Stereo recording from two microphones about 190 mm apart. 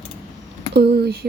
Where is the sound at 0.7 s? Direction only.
60° right (ahead or behind).